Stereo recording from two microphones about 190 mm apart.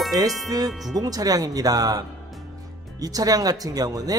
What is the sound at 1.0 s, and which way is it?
Speech, 20° right (ahead or behind).